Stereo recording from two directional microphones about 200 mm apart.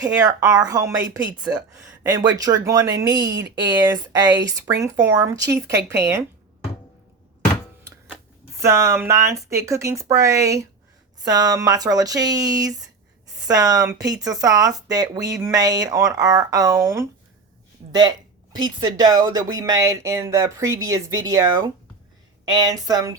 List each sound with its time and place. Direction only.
0.0 s a woman's voice: 20° right (ahead or behind)
8.6 s a woman's voice: 15° right (ahead or behind)